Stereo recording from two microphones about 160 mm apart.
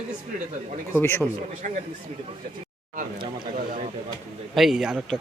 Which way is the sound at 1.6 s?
55° right (ahead or behind).